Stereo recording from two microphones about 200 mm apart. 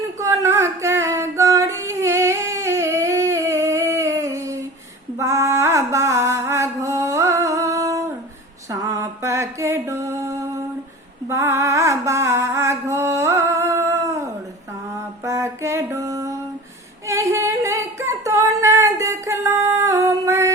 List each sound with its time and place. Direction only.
0.2 s singing: 15° right (ahead or behind)
5.1 s mantra: 15° right (ahead or behind)
8.7 s music: 15° right (ahead or behind)
11.3 s mantra: 15° right (ahead or behind)
17.1 s singing: 15° right (ahead or behind)